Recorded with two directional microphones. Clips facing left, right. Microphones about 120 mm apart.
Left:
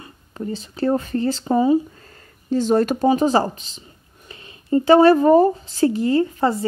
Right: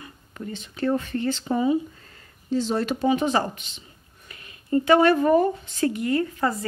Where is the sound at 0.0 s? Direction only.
30° left (ahead or behind).